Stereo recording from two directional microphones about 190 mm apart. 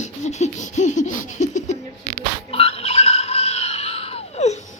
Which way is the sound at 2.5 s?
30° left (ahead or behind).